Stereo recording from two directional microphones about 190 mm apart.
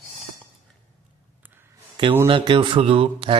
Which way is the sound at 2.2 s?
25° right (ahead or behind).